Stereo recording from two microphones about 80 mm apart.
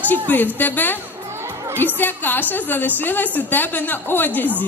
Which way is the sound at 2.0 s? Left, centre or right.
Left.